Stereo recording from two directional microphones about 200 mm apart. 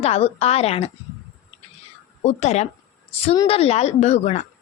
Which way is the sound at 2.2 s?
35° left (ahead or behind).